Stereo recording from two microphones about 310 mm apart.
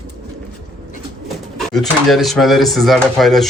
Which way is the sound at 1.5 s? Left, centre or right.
Centre.